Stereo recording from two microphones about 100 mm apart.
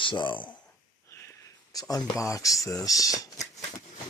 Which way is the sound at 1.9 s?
40° left (ahead or behind).